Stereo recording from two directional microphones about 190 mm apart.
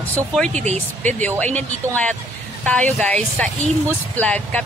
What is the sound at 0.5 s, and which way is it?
Speech, 40° right (ahead or behind).